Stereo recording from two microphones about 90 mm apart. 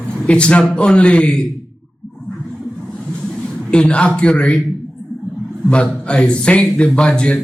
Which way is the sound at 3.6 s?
10° left (ahead or behind).